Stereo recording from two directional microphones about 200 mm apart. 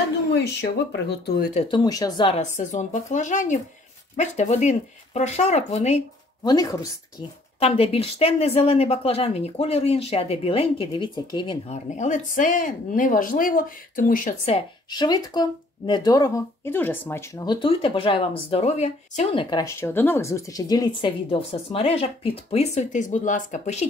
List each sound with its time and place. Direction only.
0.3 s speech: 55° left (ahead or behind)
1.7 s speech: 20° left (ahead or behind)
6.4 s speech: 20° left (ahead or behind)
7.6 s speech: 30° left (ahead or behind)
11.7 s speech: 35° left (ahead or behind)
14.9 s speech: 20° left (ahead or behind)
19.5 s speech: 15° left (ahead or behind); by 23.9 s 35° left (ahead or behind)